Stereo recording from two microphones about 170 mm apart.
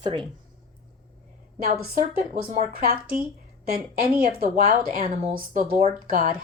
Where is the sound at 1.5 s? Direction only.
60° right (ahead or behind).